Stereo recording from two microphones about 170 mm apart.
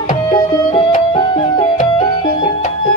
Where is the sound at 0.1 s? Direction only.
30° left (ahead or behind).